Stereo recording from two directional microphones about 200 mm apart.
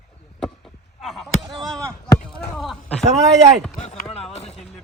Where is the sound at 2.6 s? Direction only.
Centre (ahead or behind).